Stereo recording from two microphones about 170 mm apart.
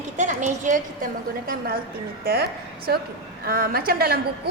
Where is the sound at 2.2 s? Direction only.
65° right (ahead or behind).